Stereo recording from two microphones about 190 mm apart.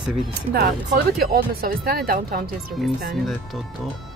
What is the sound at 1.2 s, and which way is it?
Speech, 50° right (ahead or behind).